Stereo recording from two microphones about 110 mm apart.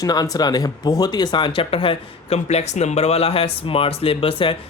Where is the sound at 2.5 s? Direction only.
90° left.